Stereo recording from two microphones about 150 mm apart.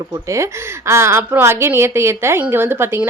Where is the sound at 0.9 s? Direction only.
15° right (ahead or behind).